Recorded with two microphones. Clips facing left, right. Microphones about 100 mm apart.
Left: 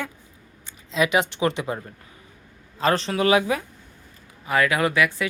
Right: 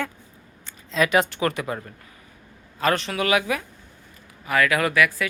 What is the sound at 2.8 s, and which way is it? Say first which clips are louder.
Speech: left 2 dB; 30° left (ahead or behind).